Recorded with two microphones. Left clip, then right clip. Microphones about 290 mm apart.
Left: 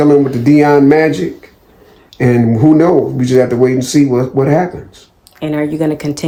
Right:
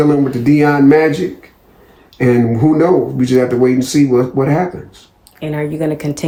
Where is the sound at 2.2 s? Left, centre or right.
Left.